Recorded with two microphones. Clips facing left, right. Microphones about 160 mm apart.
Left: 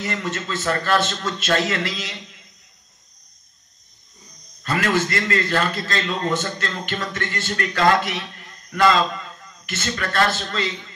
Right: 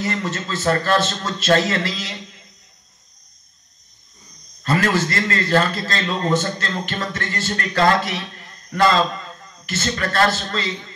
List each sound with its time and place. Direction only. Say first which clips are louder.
0.0 s a man's voice: right 2 dB; 35° right (ahead or behind)
4.6 s a man's voice: right 2 dB; 35° right (ahead or behind)
8.6 s a sound: even; 35° right (ahead or behind)
9.7 s a man's voice: right 3 dB; 35° right (ahead or behind)